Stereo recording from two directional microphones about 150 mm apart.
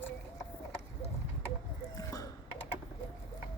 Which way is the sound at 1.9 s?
20° left (ahead or behind).